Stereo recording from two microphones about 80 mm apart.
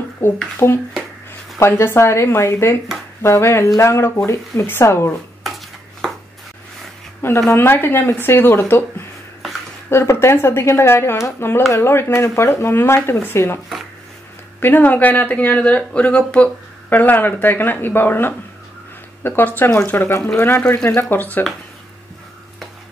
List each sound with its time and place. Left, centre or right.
0.2 s speech: left
5.4 s dishes: centre
7.2 s speech: left
9.8 s speech: left
14.6 s speech: left
20.6 s speech: centre
20.9 s speech: left